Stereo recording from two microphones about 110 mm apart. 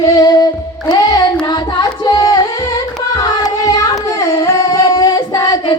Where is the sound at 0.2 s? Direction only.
40° left (ahead or behind).